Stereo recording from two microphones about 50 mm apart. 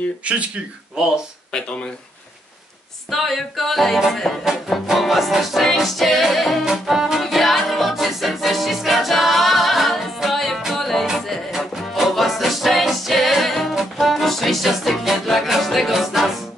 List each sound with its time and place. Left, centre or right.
0.2 s speech: right
3.1 s music: centre